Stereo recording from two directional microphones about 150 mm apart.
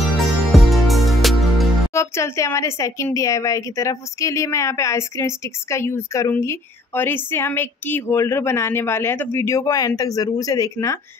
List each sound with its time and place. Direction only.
0.5 s music: centre (ahead or behind)
2.0 s a woman's voice: 20° left (ahead or behind)